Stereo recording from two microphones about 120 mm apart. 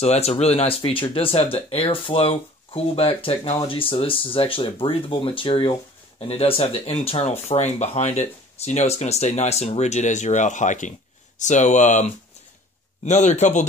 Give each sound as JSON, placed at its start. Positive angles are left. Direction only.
{"t": 0.0, "sound": "speech", "side_deg": 65}
{"t": 13.0, "sound": "speech", "side_deg": 75}